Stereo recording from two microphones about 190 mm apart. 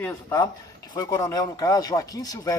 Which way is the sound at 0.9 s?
20° left (ahead or behind).